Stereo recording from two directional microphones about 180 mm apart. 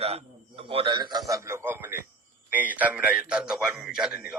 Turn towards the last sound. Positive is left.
turn(degrees=-5)  # may be behind; listen again after turning